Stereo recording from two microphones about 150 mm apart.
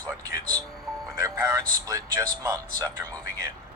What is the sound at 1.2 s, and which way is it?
Speech, 25° right (ahead or behind).